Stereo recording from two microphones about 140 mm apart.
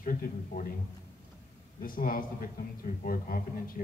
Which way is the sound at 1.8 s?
80° left.